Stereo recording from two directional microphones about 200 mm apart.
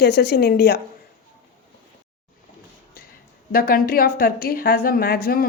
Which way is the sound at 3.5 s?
50° left (ahead or behind).